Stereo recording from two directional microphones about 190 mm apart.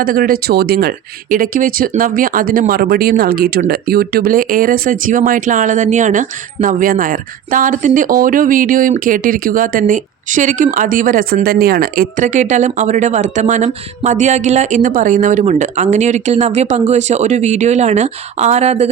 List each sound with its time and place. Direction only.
0.0 s speech: 50° right (ahead or behind)